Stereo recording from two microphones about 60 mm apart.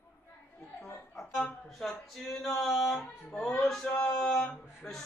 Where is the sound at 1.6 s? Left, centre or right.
Centre.